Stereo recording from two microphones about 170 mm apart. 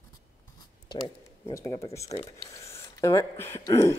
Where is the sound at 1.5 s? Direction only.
15° left (ahead or behind).